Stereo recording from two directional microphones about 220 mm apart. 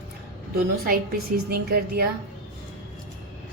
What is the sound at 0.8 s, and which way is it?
A woman's voice, 45° right (ahead or behind).